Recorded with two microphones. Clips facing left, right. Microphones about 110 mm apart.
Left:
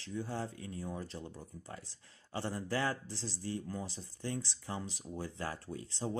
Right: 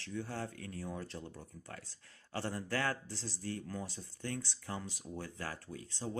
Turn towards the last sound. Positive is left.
turn(degrees=30)  # may be behind; listen again after turning